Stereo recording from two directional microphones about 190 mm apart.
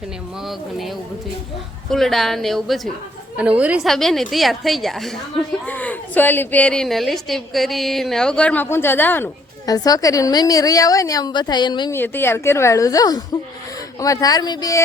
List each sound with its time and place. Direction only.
0.4 s a woman's voice: centre (ahead or behind); by 11.9 s 25° left (ahead or behind)
11.9 s a woman's voice: 10° left (ahead or behind)